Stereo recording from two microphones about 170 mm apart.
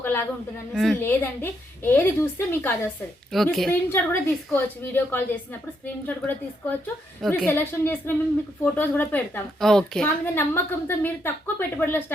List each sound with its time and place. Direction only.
0.0 s a sound: 10° left (ahead or behind)
0.7 s a woman's voice: centre (ahead or behind)
1.0 s a woman's voice: 10° left (ahead or behind)
3.3 s a woman's voice: centre (ahead or behind)
3.7 s a woman's voice: 10° left (ahead or behind)